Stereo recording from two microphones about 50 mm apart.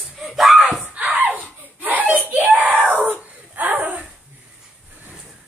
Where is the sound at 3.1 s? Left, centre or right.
Right.